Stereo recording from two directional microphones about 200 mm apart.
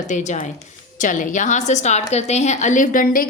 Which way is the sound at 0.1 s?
35° left (ahead or behind).